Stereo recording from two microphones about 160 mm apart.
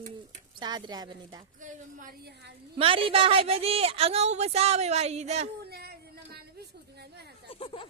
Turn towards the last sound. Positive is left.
turn(degrees=35)  # may be behind; listen again after turning